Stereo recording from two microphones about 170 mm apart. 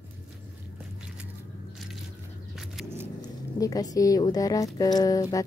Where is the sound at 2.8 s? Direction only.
Centre (ahead or behind).